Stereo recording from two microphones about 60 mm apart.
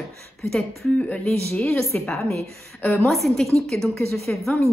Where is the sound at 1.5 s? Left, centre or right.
Left.